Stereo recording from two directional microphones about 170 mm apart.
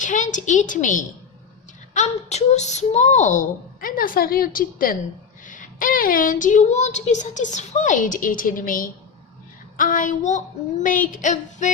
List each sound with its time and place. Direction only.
0.0 s a woman's voice: 50° left (ahead or behind)